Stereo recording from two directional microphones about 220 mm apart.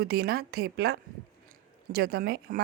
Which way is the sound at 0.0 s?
45° right (ahead or behind).